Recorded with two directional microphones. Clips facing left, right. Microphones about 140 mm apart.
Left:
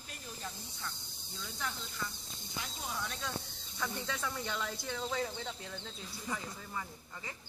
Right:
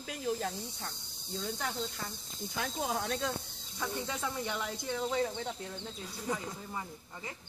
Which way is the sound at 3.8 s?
15° right (ahead or behind).